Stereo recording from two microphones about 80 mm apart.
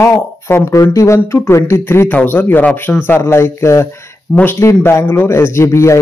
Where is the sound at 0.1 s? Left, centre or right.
Left.